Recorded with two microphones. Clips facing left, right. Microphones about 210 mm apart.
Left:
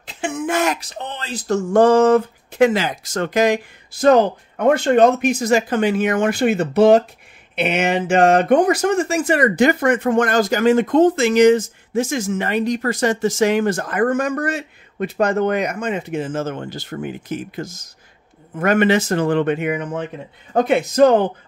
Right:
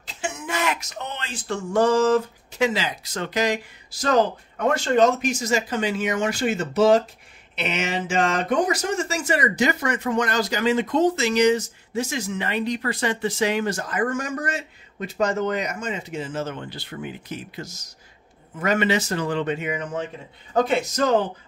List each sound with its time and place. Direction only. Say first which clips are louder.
0.0 s a sound: left 8 dB; 55° left (ahead or behind)
0.7 s speech: left 3 dB; 30° left (ahead or behind)
1.5 s speech: left 7 dB; 55° left (ahead or behind)